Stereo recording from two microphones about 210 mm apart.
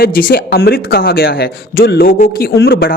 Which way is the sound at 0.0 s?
45° left (ahead or behind).